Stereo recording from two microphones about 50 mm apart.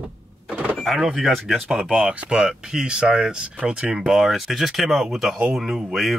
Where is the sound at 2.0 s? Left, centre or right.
Centre.